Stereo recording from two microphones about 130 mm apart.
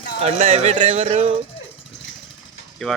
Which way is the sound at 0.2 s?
55° right (ahead or behind).